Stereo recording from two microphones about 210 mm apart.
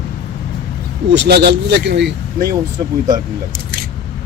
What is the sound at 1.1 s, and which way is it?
Speech, 55° right (ahead or behind).